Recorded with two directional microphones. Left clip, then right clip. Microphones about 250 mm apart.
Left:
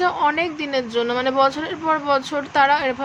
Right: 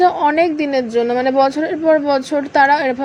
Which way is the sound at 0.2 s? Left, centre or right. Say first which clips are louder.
Right 6 dB; centre.